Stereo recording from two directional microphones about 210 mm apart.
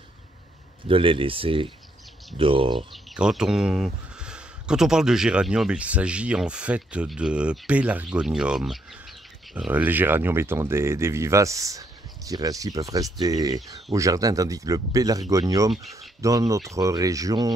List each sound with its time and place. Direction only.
0.8 s speech: 25° right (ahead or behind)
2.9 s speech: 5° right (ahead or behind)